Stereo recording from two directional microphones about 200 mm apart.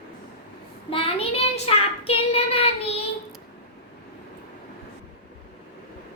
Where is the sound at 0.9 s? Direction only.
30° left (ahead or behind).